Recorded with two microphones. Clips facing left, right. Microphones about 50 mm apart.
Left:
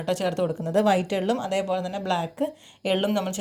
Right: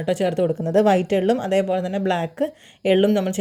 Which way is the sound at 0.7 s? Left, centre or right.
Right.